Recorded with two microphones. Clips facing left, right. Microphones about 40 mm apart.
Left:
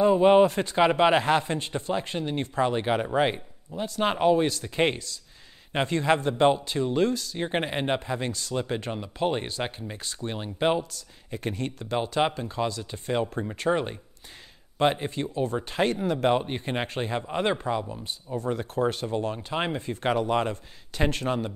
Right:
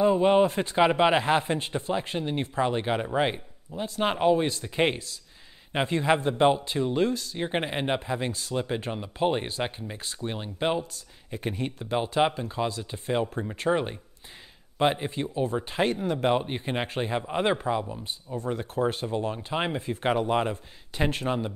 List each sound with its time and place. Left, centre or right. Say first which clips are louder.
0.0 s speech: left 2 dB; centre
8.3 s speech: left 1 dB; centre
8.5 s speech: even; centre